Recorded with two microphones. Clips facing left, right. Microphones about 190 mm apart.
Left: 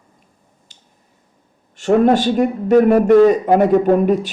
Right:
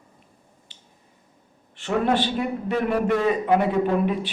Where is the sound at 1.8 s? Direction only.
45° left (ahead or behind).